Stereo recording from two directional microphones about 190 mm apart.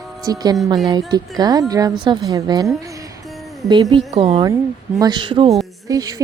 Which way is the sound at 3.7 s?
25° right (ahead or behind).